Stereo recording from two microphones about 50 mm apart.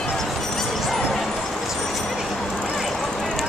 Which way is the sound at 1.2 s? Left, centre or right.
Centre.